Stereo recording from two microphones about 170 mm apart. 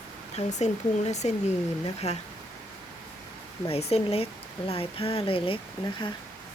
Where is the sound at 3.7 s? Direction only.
35° left (ahead or behind).